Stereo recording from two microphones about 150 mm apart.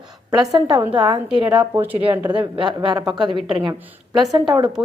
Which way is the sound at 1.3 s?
10° right (ahead or behind).